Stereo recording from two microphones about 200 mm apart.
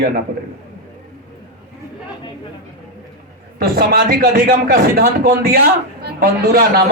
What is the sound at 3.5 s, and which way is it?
A man's voice, 45° right (ahead or behind).